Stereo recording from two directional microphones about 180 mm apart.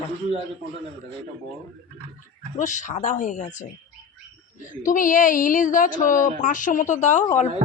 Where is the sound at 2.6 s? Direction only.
45° left (ahead or behind).